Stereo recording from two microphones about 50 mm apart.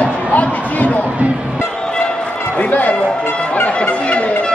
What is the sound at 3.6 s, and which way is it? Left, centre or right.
Music, left.